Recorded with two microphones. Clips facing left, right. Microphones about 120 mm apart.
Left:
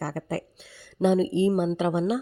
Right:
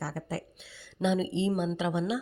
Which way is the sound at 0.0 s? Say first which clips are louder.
Left 5 dB; 55° left (ahead or behind).